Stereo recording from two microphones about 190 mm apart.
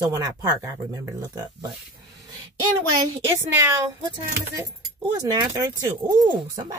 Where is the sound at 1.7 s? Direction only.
20° right (ahead or behind).